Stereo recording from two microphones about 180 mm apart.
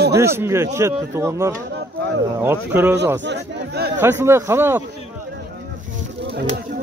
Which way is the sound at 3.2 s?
70° right (ahead or behind).